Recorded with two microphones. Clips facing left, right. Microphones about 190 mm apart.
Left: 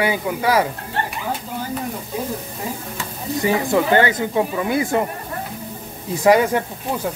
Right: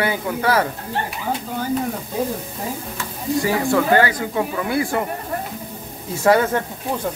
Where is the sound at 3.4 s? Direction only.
20° left (ahead or behind).